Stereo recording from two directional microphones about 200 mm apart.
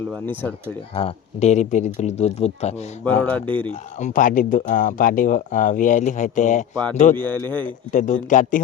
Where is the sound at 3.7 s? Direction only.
35° left (ahead or behind).